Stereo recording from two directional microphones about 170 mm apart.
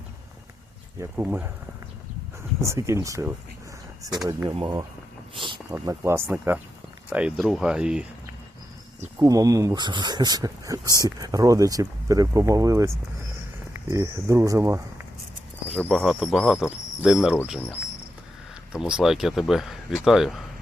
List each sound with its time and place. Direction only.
1.1 s speech: 10° right (ahead or behind)
2.6 s speech: 20° right (ahead or behind)
5.3 s a sound: 30° right (ahead or behind)
5.7 s speech: 15° right (ahead or behind)
9.0 s speech: 15° right (ahead or behind)
13.9 s speech: 20° right (ahead or behind)
15.7 s speech: 5° left (ahead or behind)
17.0 s speech: centre (ahead or behind)
18.7 s speech: 5° right (ahead or behind)